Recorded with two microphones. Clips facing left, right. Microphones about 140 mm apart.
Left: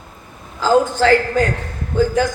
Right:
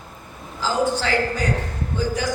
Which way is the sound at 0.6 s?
50° left (ahead or behind).